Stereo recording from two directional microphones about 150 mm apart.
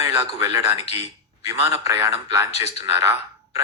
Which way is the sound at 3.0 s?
20° right (ahead or behind).